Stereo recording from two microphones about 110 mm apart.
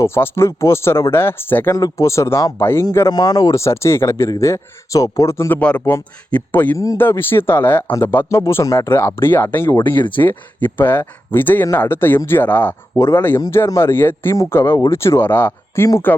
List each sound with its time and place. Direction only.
0.0 s speech: 25° left (ahead or behind)
1.7 s speech: 30° left (ahead or behind)
3.1 s speech: 35° left (ahead or behind)
5.5 s speech: 15° left (ahead or behind)